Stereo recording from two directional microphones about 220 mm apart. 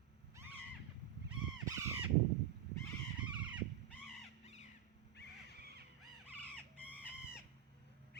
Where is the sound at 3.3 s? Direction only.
5° right (ahead or behind).